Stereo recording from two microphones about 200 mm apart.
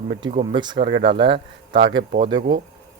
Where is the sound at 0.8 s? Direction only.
60° right (ahead or behind).